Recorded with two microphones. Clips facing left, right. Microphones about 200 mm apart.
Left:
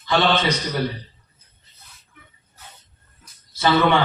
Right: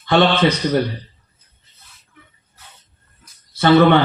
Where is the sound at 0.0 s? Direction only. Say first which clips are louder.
Right 5 dB; 60° right (ahead or behind).